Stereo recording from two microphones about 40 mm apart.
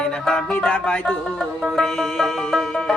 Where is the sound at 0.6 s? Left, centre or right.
Left.